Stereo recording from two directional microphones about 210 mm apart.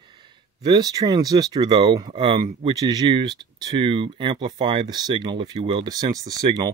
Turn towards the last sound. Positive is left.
turn(degrees=-15)  # may be behind; listen again after turning